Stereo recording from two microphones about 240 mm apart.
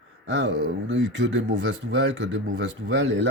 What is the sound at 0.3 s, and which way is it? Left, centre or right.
Speech, right.